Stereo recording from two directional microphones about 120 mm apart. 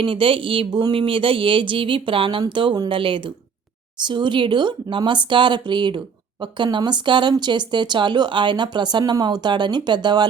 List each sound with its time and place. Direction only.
0.0 s speech: 45° right (ahead or behind)